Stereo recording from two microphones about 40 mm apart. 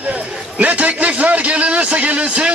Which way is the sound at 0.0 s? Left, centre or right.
Right.